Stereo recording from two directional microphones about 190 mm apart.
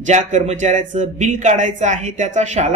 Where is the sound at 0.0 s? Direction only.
40° right (ahead or behind).